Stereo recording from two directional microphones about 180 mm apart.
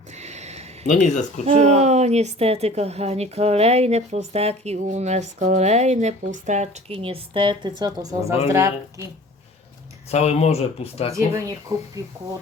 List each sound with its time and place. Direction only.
0.1 s a sound: 40° right (ahead or behind)
0.9 s speech: 40° left (ahead or behind)
1.5 s a woman's voice: 40° right (ahead or behind); by 9.0 s 15° right (ahead or behind)
10.1 s speech: 35° left (ahead or behind)
12.0 s speech: 20° right (ahead or behind)